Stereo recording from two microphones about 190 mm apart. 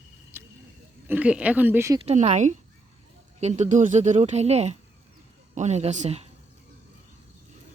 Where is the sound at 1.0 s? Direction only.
5° right (ahead or behind).